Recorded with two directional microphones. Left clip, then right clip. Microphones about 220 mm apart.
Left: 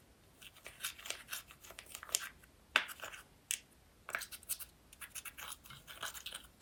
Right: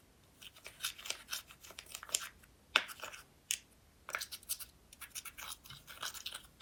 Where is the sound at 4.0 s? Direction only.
Centre (ahead or behind).